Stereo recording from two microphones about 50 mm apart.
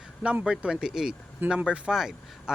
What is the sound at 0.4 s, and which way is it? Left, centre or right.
Speech, centre.